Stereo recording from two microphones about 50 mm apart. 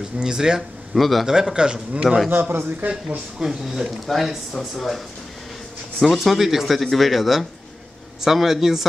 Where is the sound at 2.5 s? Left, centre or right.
Right.